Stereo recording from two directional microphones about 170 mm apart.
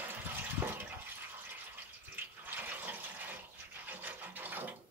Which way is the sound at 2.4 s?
10° right (ahead or behind).